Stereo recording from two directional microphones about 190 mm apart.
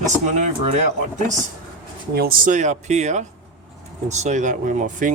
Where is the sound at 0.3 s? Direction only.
40° right (ahead or behind).